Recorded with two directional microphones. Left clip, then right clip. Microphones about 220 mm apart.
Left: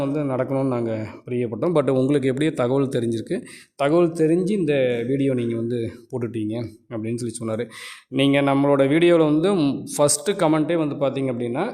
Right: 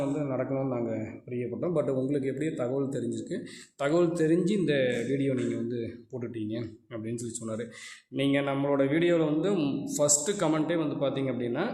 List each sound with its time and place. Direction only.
0.0 s speech: 45° left (ahead or behind)